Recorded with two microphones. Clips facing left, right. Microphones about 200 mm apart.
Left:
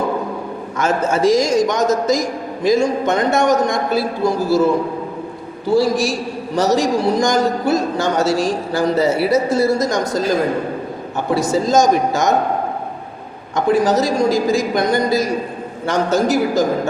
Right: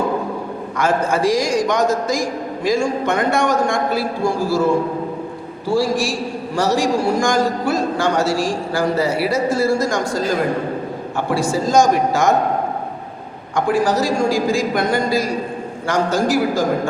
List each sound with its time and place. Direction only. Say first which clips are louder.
0.8 s a man's voice: left 1 dB; 25° left (ahead or behind)
5.6 s a man's voice: left 3 dB; 20° left (ahead or behind)
11.3 s a man's voice: left 1 dB; 20° left (ahead or behind)
13.7 s a man's voice: left 3 dB; 20° left (ahead or behind)